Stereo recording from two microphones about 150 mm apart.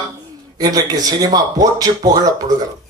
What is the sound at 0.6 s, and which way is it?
A man's voice, 25° right (ahead or behind).